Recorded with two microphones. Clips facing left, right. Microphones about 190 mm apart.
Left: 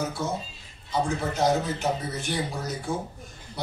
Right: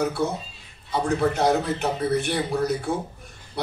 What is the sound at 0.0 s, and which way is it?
Speech, 65° right (ahead or behind).